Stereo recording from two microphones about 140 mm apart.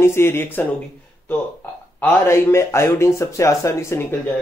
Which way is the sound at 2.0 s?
20° left (ahead or behind).